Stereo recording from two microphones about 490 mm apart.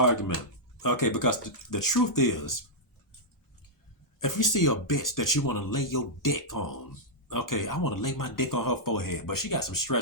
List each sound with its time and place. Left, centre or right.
0.0 s speech: left
4.2 s speech: left